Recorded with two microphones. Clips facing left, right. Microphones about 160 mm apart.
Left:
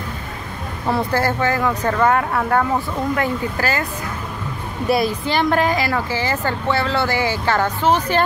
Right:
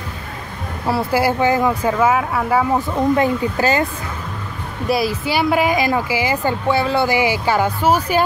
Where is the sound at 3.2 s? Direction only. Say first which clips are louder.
Right 4 dB; 20° right (ahead or behind).